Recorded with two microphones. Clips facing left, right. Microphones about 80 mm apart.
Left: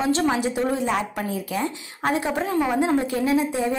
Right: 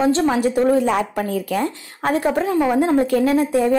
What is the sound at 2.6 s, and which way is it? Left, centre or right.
A woman's voice, right.